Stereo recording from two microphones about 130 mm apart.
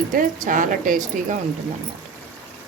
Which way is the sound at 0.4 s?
90° right.